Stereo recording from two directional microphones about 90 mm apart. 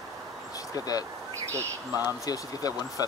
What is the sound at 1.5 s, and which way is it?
Speech, 30° right (ahead or behind).